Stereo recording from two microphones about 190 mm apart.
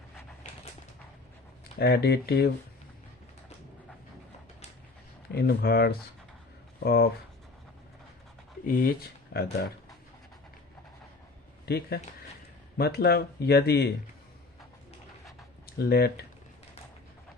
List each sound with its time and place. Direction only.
1.8 s speech: 60° left (ahead or behind)
5.3 s speech: 55° left (ahead or behind)
8.6 s speech: 45° left (ahead or behind)
11.6 s speech: 55° left (ahead or behind)
15.8 s speech: 60° left (ahead or behind)